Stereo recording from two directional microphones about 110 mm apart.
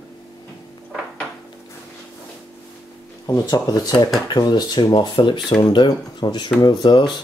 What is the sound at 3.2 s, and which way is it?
Speech, 35° left (ahead or behind).